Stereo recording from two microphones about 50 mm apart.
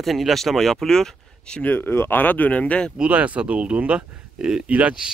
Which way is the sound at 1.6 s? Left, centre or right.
Left.